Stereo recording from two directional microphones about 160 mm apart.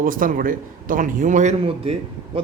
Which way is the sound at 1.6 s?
35° right (ahead or behind).